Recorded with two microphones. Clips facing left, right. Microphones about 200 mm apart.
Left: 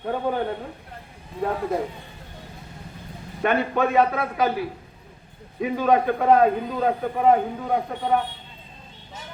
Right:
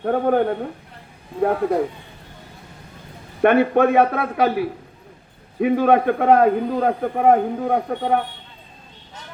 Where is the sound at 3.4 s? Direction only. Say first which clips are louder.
Right 7 dB; 60° right (ahead or behind).